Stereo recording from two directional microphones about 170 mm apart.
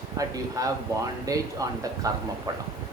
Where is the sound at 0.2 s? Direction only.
20° right (ahead or behind).